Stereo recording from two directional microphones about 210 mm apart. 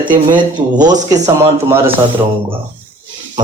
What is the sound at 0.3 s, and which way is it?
Speech, 20° right (ahead or behind).